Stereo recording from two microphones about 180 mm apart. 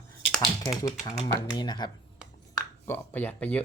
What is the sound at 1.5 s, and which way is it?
Speech, 25° left (ahead or behind).